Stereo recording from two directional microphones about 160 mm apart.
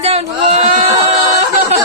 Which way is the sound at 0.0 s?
40° right (ahead or behind).